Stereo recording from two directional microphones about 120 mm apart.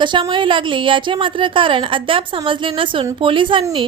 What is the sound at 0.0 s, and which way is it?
A woman's voice, 45° right (ahead or behind).